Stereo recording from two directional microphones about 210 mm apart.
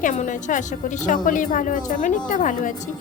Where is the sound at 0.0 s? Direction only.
35° left (ahead or behind).